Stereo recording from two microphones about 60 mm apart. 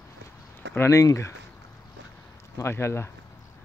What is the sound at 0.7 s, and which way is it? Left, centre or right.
Speech, left.